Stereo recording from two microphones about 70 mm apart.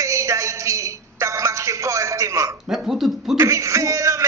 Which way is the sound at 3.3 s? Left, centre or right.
Right.